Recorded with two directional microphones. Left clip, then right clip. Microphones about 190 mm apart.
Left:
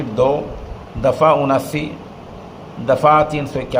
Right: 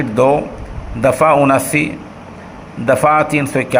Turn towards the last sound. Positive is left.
turn(degrees=-20)  # may be behind; listen again after turning